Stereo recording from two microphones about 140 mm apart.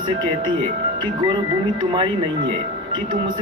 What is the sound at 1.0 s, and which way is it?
Speech, 35° right (ahead or behind).